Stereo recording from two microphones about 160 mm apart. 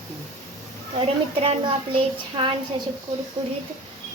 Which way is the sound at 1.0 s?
35° right (ahead or behind).